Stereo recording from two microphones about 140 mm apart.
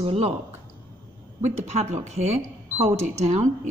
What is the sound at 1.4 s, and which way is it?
Speech, 50° right (ahead or behind).